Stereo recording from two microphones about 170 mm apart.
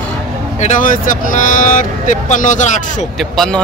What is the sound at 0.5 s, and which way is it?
Speech, 50° left (ahead or behind).